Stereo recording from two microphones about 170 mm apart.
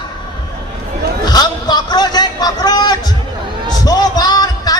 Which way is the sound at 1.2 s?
25° left (ahead or behind).